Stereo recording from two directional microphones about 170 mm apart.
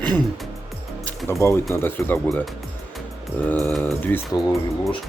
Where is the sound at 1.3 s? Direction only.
15° left (ahead or behind).